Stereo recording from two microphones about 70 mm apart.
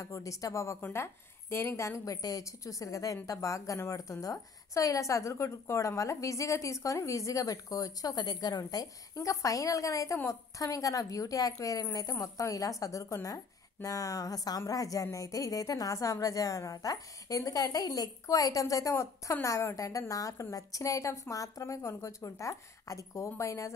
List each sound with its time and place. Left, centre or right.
0.0 s a woman's voice: left
0.9 s a woman's voice: left